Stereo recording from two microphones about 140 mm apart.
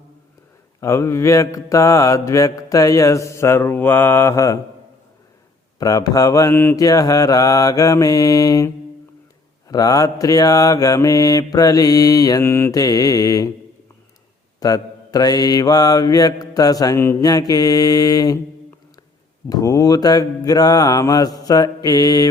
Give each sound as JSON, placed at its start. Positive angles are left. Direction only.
{"t": 0.8, "sound": "mantra", "side_deg": 20}
{"t": 5.8, "sound": "mantra", "side_deg": 25}
{"t": 14.6, "sound": "mantra", "side_deg": 25}
{"t": 19.5, "sound": "mantra", "side_deg": 25}